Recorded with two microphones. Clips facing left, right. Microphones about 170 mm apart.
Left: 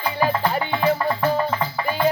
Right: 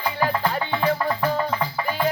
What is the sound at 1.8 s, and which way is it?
Music, 15° left (ahead or behind).